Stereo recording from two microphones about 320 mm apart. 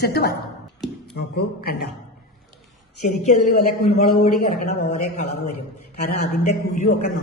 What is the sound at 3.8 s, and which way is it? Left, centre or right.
A woman's voice, left.